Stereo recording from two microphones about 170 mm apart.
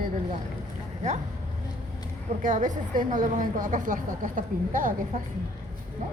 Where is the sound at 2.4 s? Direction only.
50° right (ahead or behind).